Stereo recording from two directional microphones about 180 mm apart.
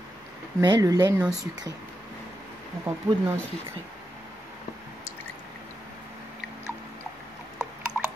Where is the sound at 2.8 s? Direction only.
15° right (ahead or behind).